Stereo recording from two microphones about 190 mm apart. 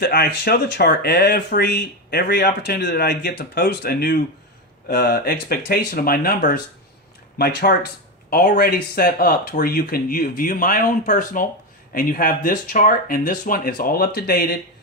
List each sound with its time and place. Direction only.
0.0 s speech: 60° left (ahead or behind)